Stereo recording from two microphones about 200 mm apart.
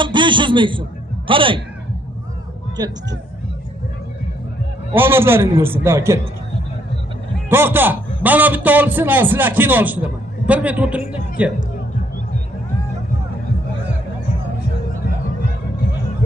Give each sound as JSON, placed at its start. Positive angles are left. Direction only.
{"t": 0.0, "sound": "a man's voice", "side_deg": -25}
{"t": 4.9, "sound": "a man's voice", "side_deg": -10}
{"t": 7.5, "sound": "a man's voice", "side_deg": -10}